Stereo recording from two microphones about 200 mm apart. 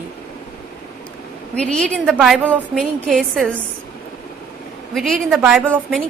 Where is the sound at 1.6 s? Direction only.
5° left (ahead or behind).